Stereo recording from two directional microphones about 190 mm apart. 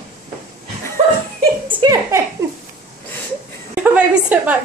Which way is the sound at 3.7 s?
5° right (ahead or behind).